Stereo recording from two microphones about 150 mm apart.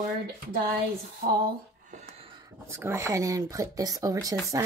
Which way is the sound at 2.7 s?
15° right (ahead or behind).